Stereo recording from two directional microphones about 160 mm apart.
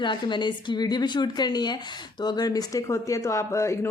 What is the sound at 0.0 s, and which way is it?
Speech, 30° left (ahead or behind).